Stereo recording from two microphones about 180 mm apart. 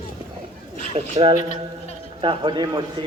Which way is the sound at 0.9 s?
35° right (ahead or behind).